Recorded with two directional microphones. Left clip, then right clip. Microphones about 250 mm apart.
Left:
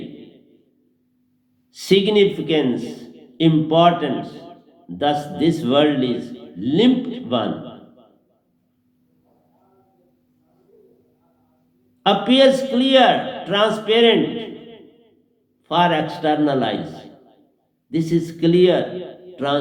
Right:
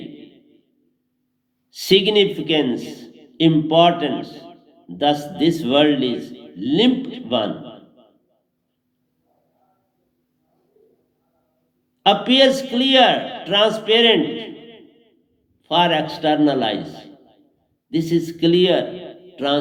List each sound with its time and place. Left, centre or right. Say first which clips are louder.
0.0 s a sound: left 1 dB; right
1.7 s a man's voice: right 1 dB; right
12.0 s a man's voice: even; right